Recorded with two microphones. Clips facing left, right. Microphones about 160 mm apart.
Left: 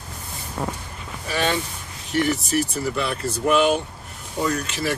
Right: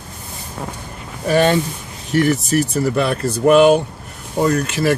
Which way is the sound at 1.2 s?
50° right (ahead or behind).